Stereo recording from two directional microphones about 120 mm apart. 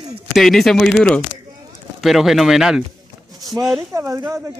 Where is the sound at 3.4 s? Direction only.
30° right (ahead or behind).